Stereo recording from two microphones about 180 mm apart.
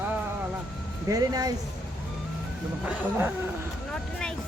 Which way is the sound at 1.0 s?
20° right (ahead or behind).